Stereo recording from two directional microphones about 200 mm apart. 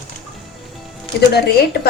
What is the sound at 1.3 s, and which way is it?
Speech, 55° left (ahead or behind).